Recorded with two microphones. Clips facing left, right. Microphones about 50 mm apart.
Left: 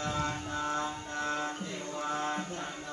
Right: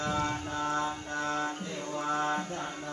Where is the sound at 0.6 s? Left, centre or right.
Right.